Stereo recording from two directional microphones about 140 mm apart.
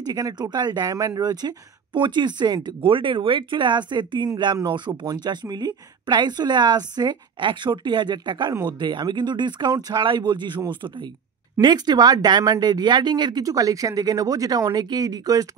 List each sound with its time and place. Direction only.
0.0 s speech: 30° right (ahead or behind)